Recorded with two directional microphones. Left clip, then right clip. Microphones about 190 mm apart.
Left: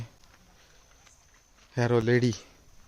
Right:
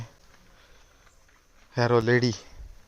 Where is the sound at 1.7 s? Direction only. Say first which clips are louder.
Right 3 dB; 15° left (ahead or behind).